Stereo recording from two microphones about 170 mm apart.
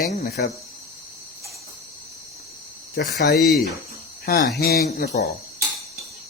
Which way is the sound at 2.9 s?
60° left (ahead or behind).